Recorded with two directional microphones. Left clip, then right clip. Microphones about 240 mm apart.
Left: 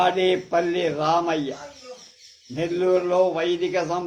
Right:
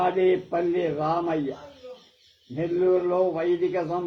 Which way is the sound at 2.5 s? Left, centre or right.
Left.